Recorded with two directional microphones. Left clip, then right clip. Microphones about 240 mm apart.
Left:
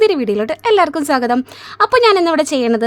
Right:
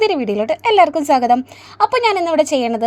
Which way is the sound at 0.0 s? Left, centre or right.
Centre.